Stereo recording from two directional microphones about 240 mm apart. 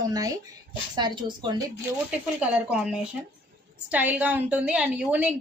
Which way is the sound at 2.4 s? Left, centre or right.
Centre.